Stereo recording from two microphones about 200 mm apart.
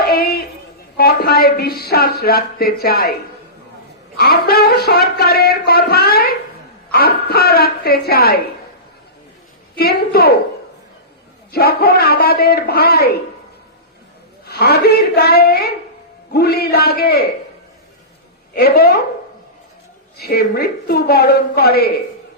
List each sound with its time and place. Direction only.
0.0 s a sound: 50° left (ahead or behind)
0.9 s speech: 50° left (ahead or behind)
4.2 s speech: 50° left (ahead or behind)
9.7 s speech: 50° left (ahead or behind)
11.5 s speech: 50° left (ahead or behind)
14.4 s speech: 50° left (ahead or behind)
18.5 s speech: 50° left (ahead or behind)
20.1 s speech: 50° left (ahead or behind)